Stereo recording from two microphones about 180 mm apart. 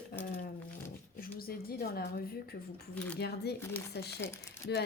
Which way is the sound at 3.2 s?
65° left (ahead or behind).